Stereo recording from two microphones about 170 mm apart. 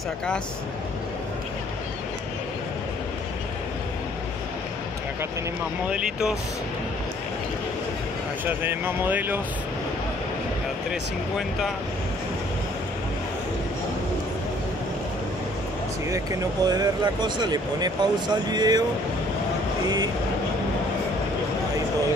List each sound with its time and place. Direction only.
5.9 s speech: 5° right (ahead or behind)
8.5 s speech: 10° right (ahead or behind)
10.9 s speech: centre (ahead or behind)
16.1 s speech: 20° right (ahead or behind)